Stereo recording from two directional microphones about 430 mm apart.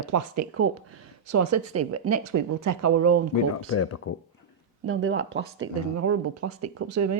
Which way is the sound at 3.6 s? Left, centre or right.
Left.